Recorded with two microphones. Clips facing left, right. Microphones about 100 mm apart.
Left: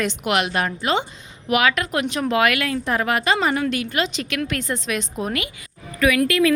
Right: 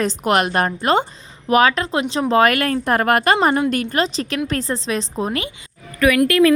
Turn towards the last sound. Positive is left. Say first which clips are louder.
# right 4 dB
turn(degrees=-45)  # may be behind; listen again after turning